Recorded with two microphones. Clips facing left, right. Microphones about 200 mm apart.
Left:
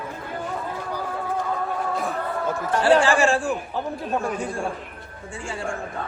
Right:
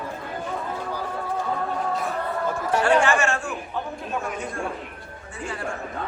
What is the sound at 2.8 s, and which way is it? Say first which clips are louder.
A man's voice: left 3 dB; 30° left (ahead or behind).